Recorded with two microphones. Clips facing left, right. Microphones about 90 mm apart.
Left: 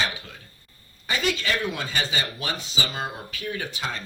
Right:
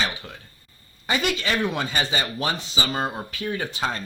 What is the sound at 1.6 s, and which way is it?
Speech, 35° right (ahead or behind).